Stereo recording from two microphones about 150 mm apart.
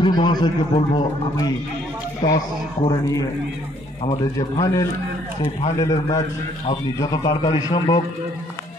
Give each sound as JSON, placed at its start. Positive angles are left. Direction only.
{"t": 0.0, "sound": "a man's voice", "side_deg": 30}
{"t": 4.4, "sound": "a man's voice", "side_deg": 25}
{"t": 5.4, "sound": "speech", "side_deg": 35}
{"t": 7.0, "sound": "a man's voice", "side_deg": 25}